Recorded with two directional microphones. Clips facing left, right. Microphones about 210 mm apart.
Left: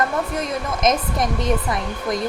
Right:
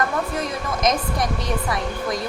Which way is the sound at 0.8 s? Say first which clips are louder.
Left 1 dB; 20° left (ahead or behind).